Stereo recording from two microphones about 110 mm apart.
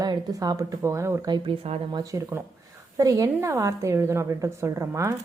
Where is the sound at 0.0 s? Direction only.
35° right (ahead or behind).